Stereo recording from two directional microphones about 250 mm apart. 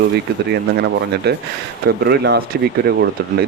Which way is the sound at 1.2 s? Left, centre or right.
Right.